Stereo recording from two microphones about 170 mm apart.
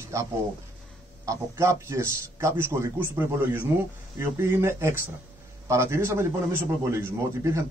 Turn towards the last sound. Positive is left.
turn(degrees=-15)  # may be behind; listen again after turning